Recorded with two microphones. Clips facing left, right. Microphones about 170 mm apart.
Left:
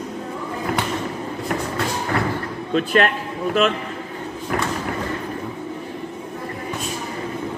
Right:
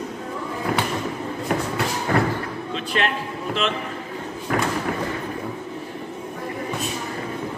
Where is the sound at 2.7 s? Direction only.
50° left (ahead or behind).